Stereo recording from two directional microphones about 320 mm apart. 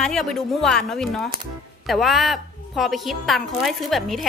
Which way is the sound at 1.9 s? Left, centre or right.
Centre.